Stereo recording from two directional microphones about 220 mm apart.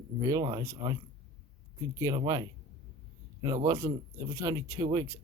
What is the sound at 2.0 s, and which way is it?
Speech, 15° right (ahead or behind).